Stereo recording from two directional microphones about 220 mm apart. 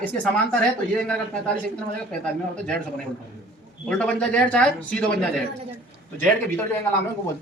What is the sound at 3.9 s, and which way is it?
Speech, 5° left (ahead or behind).